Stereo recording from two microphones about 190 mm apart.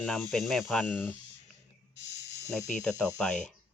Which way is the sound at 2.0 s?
65° left (ahead or behind).